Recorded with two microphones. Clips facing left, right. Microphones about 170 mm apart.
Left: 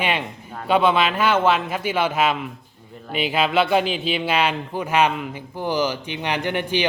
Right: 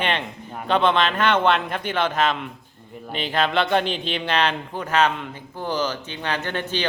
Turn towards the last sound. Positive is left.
turn(degrees=15)  # may be behind; listen again after turning